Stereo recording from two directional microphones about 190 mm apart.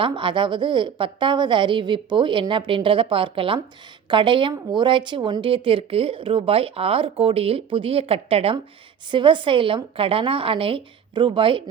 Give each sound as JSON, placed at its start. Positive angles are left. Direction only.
{"t": 0.0, "sound": "speech", "side_deg": -25}